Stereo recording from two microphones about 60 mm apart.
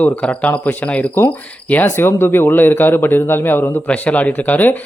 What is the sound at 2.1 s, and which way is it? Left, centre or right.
A man's voice, left.